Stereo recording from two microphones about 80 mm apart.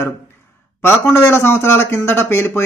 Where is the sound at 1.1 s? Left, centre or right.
Left.